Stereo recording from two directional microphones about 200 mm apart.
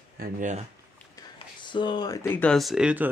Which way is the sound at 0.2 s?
40° right (ahead or behind).